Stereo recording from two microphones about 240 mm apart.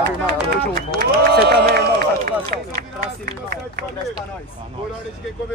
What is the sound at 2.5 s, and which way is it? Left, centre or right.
Speech, right.